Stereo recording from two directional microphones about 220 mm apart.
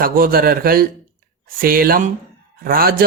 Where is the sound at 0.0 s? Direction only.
40° right (ahead or behind).